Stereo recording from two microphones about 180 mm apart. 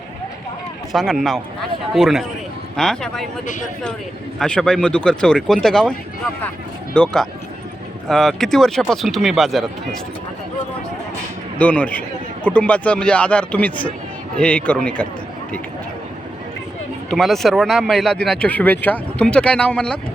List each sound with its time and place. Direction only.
0.9 s speech: centre (ahead or behind)
3.4 s speech: 45° left (ahead or behind)
4.4 s speech: 5° left (ahead or behind)
6.9 s speech: 5° left (ahead or behind)
11.5 s speech: 5° left (ahead or behind)
17.1 s speech: centre (ahead or behind)